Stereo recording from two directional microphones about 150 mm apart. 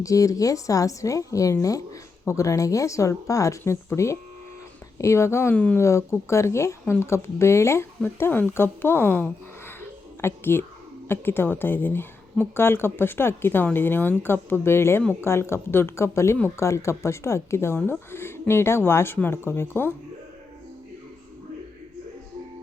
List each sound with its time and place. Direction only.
0.0 s a woman's voice: 20° left (ahead or behind)